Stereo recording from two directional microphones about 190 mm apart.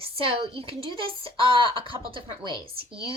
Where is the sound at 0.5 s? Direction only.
30° right (ahead or behind).